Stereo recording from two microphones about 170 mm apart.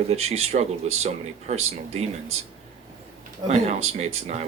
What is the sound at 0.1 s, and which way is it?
Speech, 40° right (ahead or behind).